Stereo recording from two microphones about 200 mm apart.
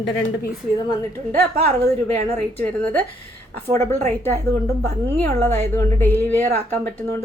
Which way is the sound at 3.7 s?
10° left (ahead or behind).